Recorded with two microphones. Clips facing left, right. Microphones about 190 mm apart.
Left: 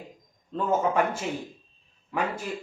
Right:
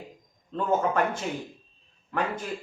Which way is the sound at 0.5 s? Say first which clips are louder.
Left 1 dB; 5° left (ahead or behind).